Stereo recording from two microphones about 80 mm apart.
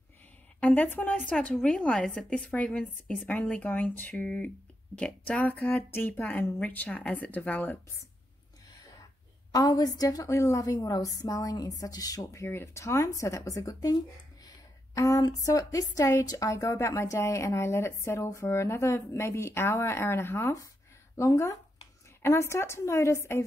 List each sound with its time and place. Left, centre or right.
0.6 s a woman's voice: left
9.5 s a woman's voice: left
12.4 s a woman's voice: left